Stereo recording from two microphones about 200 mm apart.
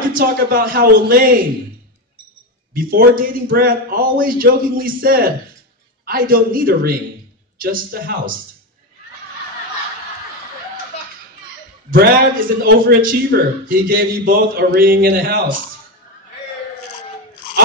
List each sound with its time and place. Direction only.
0.1 s a man's voice: 45° right (ahead or behind)
2.7 s a man's voice: 45° right (ahead or behind)
11.9 s a man's voice: 45° right (ahead or behind)